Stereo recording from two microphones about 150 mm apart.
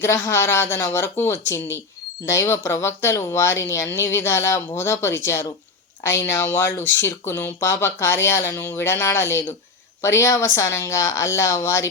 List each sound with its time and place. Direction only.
0.0 s a woman's voice: 15° left (ahead or behind)